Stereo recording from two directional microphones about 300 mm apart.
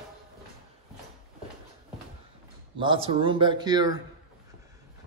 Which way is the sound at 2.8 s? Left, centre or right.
Centre.